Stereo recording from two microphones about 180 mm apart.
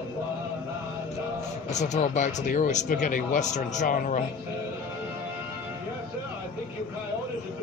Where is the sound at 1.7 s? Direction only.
40° left (ahead or behind).